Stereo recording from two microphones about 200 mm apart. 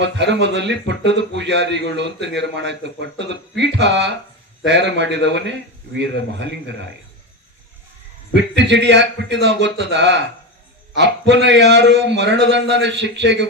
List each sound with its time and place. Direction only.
0.0 s a man's voice: 60° right (ahead or behind)
8.3 s a man's voice: 60° right (ahead or behind)